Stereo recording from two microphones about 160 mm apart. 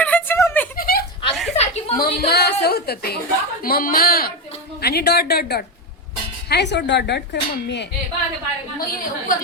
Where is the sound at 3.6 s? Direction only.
60° left (ahead or behind).